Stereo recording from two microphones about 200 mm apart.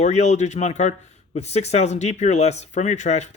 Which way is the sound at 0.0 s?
35° left (ahead or behind).